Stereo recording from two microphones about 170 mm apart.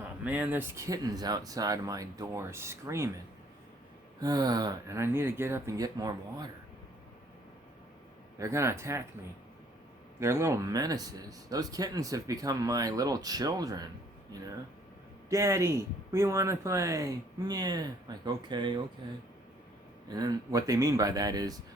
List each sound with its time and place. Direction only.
0.3 s speech: 10° right (ahead or behind)
4.2 s speech: 20° right (ahead or behind)
8.4 s speech: 15° right (ahead or behind)
10.2 s speech: 15° right (ahead or behind)
15.3 s speech: 15° right (ahead or behind)
20.1 s speech: 20° right (ahead or behind)